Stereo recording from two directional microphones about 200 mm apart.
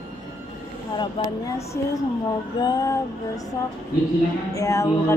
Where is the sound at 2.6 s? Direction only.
20° left (ahead or behind).